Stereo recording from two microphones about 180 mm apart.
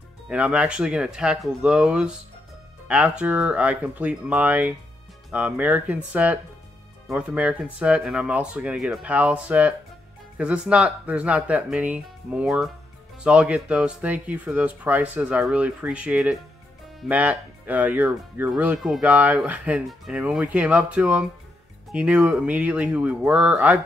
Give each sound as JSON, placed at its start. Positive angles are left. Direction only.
{"t": 0.3, "sound": "speech", "side_deg": -5}